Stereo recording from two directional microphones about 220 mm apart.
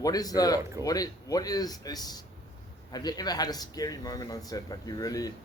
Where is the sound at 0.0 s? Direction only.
15° left (ahead or behind).